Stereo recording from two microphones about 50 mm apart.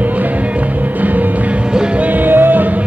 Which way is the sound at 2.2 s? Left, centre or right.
Right.